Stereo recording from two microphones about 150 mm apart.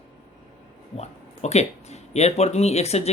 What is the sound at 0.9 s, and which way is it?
Speech, 45° left (ahead or behind).